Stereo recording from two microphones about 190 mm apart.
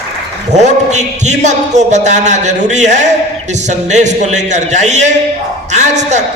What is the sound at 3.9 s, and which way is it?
Speech, 40° right (ahead or behind).